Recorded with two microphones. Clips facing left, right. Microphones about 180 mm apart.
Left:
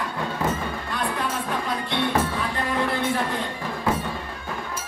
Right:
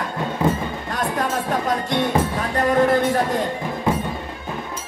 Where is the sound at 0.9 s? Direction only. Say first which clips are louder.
Right 5 dB; 45° right (ahead or behind).